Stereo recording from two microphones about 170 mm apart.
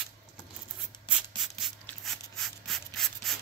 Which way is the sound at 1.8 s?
Centre (ahead or behind).